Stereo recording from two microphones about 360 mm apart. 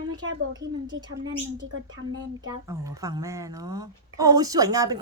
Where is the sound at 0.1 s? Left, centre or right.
Right.